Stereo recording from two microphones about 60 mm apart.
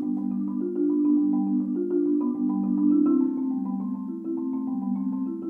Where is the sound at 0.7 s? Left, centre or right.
Centre.